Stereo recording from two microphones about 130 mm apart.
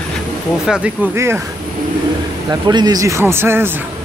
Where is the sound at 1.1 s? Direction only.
20° right (ahead or behind).